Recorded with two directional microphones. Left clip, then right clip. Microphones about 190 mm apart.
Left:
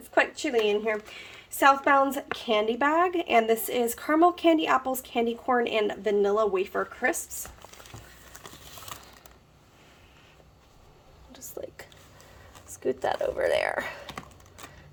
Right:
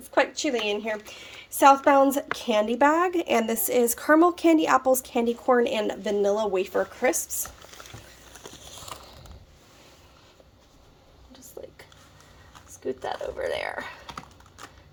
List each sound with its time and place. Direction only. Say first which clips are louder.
0.1 s a woman's voice: right 1 dB; 15° right (ahead or behind)
11.6 s whispering: left 3 dB; 45° left (ahead or behind)
12.8 s speech: left 4 dB; 45° left (ahead or behind)